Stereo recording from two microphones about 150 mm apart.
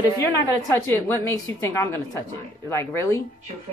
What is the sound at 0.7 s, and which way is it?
Speech, 15° left (ahead or behind).